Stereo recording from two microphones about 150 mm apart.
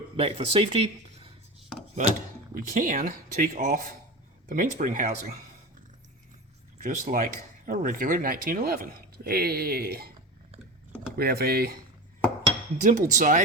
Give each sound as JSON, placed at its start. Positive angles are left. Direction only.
{"t": 0.2, "sound": "speech", "side_deg": -40}
{"t": 2.0, "sound": "speech", "side_deg": -55}
{"t": 6.8, "sound": "speech", "side_deg": -65}
{"t": 11.2, "sound": "speech", "side_deg": -90}
{"t": 12.8, "sound": "speech", "side_deg": -55}